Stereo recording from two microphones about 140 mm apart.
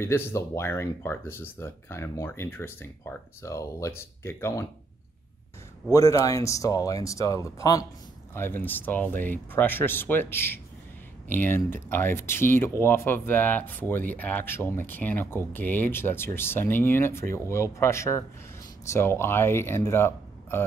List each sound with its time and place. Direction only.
0.0 s speech: 15° left (ahead or behind)
5.9 s speech: 25° left (ahead or behind)